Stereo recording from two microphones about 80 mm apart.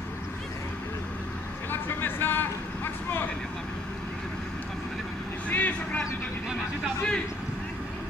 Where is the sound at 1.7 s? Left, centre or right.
Left.